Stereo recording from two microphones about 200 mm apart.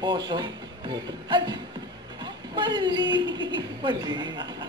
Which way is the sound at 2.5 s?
20° right (ahead or behind).